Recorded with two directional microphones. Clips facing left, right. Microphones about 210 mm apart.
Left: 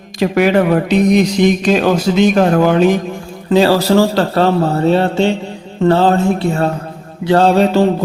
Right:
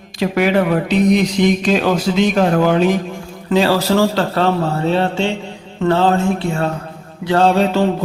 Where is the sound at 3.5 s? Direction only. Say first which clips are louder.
Left 4 dB; 35° left (ahead or behind).